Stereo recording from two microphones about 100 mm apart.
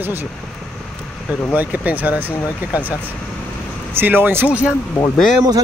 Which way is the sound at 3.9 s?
20° right (ahead or behind).